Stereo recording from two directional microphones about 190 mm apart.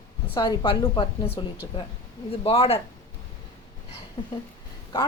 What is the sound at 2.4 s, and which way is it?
Speech, 30° left (ahead or behind).